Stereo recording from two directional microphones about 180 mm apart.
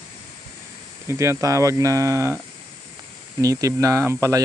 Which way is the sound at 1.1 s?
15° right (ahead or behind).